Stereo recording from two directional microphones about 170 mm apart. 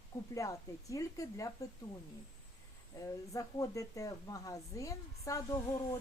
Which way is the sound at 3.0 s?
20° left (ahead or behind).